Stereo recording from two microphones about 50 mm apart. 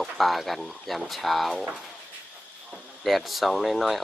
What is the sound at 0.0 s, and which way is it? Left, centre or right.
Speech, centre.